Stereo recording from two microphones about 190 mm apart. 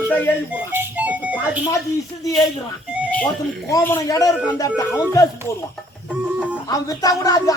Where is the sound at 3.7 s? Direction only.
15° left (ahead or behind).